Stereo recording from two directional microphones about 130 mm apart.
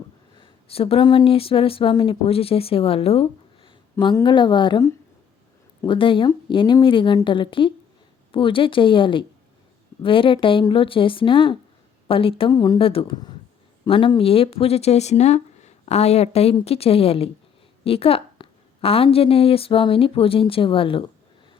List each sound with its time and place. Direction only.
0.3 s a sound: 45° left (ahead or behind)
1.0 s speech: 40° left (ahead or behind)
3.9 s speech: 35° left (ahead or behind)
5.9 s speech: 40° left (ahead or behind)
12.5 s speech: 30° left (ahead or behind)
12.8 s speech: 45° left (ahead or behind)